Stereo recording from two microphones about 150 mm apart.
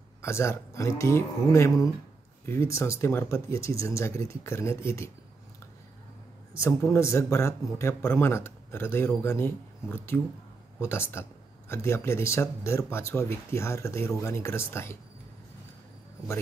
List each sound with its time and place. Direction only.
0.2 s speech: 20° left (ahead or behind)
6.5 s a man's voice: 20° left (ahead or behind)